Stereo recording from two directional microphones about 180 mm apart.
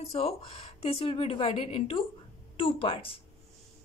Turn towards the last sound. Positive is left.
turn(degrees=30)  # may be behind; listen again after turning